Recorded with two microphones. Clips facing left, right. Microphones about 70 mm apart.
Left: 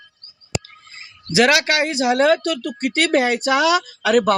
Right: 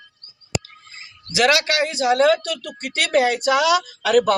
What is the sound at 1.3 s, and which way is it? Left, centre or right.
Speech, left.